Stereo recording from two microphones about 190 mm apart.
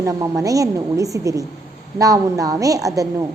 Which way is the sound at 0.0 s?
15° right (ahead or behind).